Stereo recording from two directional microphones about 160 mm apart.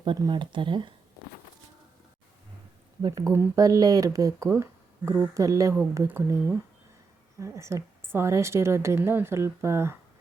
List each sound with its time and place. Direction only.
0.0 s speech: 30° right (ahead or behind)
3.0 s a woman's voice: 25° right (ahead or behind)